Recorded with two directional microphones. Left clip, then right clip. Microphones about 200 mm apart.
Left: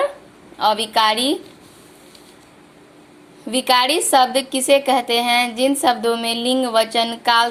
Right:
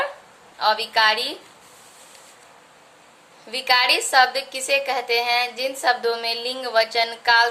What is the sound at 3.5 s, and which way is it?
A woman's voice, 25° left (ahead or behind).